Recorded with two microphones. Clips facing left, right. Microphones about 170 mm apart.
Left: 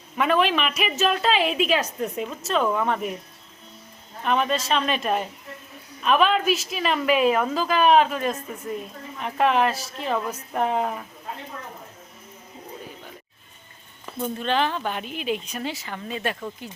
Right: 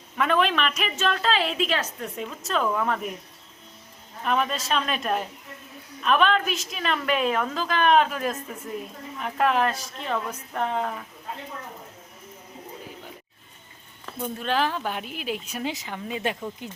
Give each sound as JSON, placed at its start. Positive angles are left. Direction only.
{"t": 0.2, "sound": "a woman's voice", "side_deg": 5}
{"t": 4.2, "sound": "a woman's voice", "side_deg": 0}
{"t": 14.2, "sound": "a woman's voice", "side_deg": -5}